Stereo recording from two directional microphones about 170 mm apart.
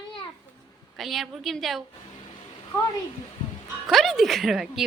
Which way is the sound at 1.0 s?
Centre (ahead or behind).